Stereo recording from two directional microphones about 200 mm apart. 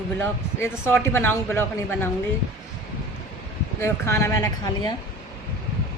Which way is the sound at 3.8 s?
15° left (ahead or behind).